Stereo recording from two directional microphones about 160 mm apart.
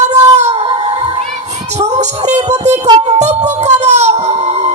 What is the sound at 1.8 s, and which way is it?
Music, 45° right (ahead or behind).